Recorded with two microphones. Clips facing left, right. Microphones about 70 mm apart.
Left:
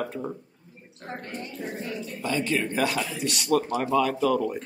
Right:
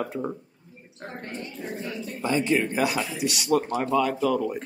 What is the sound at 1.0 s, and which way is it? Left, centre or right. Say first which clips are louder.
Speech: left 1 dB; right.